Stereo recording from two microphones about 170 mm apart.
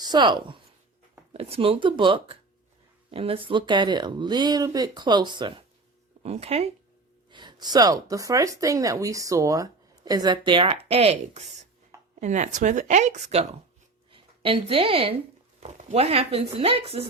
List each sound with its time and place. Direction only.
0.0 s speech: 25° right (ahead or behind)
7.3 s a woman's voice: 25° right (ahead or behind)